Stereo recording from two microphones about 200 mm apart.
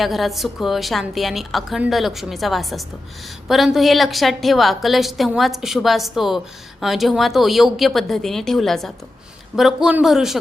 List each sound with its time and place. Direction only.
0.0 s a woman's voice: centre (ahead or behind)